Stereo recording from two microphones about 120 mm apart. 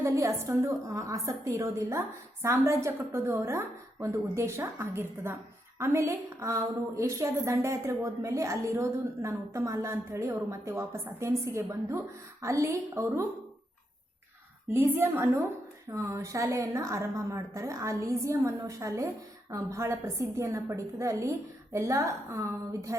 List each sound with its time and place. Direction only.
0.0 s a woman's voice: 25° right (ahead or behind)
14.7 s a woman's voice: 20° right (ahead or behind)